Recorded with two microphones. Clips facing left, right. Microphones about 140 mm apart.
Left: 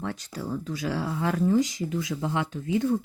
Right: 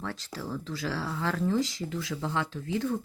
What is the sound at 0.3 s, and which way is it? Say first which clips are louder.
Speech: left 4 dB; 15° left (ahead or behind).